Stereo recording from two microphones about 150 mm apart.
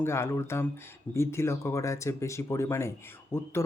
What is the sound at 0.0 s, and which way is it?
A man's voice, 15° left (ahead or behind).